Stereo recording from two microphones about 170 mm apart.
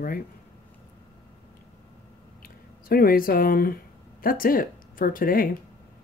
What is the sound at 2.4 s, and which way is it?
Speech, 60° left (ahead or behind).